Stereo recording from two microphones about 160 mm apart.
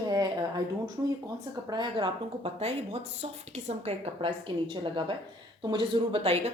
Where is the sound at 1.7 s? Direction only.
30° right (ahead or behind).